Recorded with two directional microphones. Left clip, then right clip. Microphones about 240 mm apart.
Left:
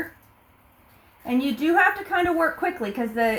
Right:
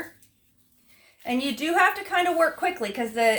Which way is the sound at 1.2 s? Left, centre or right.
Right.